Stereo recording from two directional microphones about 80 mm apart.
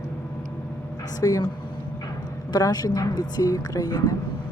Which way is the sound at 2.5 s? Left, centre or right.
Left.